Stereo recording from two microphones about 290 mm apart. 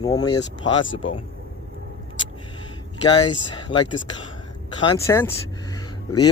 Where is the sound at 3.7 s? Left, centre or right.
Left.